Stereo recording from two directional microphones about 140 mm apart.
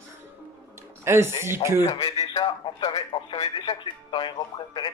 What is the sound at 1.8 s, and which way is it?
A man's voice, 30° left (ahead or behind).